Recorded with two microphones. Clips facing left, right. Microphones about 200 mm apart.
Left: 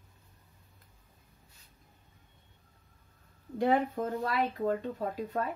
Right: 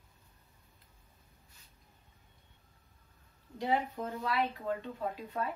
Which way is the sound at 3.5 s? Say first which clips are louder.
Left 5 dB; 55° left (ahead or behind).